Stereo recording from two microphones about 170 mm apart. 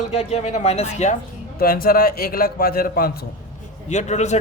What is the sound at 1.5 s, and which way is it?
A man's voice, 60° left (ahead or behind).